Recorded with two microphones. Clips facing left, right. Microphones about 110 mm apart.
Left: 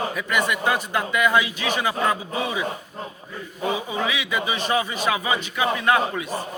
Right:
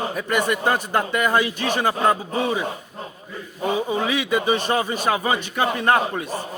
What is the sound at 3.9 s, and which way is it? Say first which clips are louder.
A man's voice: right 3 dB; 40° right (ahead or behind).